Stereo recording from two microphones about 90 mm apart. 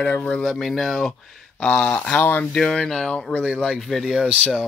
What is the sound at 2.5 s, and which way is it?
Speech, 10° left (ahead or behind).